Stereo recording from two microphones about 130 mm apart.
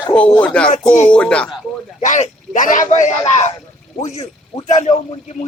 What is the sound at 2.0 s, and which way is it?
A man's voice, 70° left (ahead or behind).